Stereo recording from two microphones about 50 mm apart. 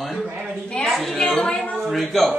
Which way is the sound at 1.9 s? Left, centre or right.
Centre.